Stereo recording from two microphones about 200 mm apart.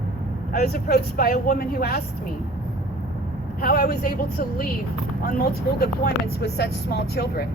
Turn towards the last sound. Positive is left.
turn(degrees=55)  # may be behind; listen again after turning